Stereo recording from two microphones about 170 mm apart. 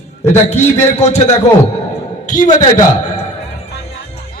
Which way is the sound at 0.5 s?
45° left (ahead or behind).